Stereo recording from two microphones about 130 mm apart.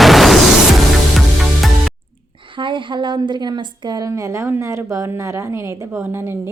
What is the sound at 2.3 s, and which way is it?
Speech, 40° right (ahead or behind).